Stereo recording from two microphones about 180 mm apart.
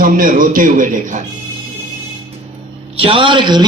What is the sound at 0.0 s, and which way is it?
A man's voice, 50° right (ahead or behind).